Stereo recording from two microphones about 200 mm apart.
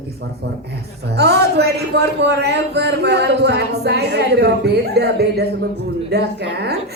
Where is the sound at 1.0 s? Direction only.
55° right (ahead or behind).